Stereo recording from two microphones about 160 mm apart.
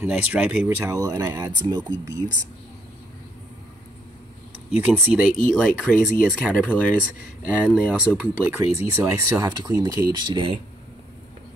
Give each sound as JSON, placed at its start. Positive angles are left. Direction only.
{"t": 0.0, "sound": "speech", "side_deg": -10}
{"t": 4.6, "sound": "speech", "side_deg": -5}
{"t": 5.4, "sound": "speech", "side_deg": 5}
{"t": 7.0, "sound": "speech", "side_deg": -5}